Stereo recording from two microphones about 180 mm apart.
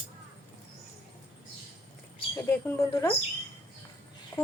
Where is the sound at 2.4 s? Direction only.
10° left (ahead or behind).